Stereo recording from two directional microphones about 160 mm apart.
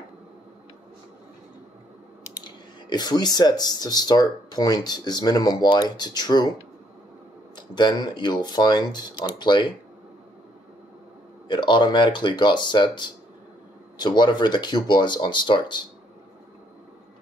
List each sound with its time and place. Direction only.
2.4 s speech: 25° left (ahead or behind)
7.5 s speech: 25° left (ahead or behind)
11.4 s speech: 30° left (ahead or behind)